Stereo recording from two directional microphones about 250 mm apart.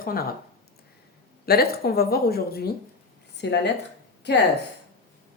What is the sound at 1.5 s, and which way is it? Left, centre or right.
Speech, left.